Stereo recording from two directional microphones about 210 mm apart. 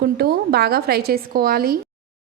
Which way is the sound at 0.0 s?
50° right (ahead or behind).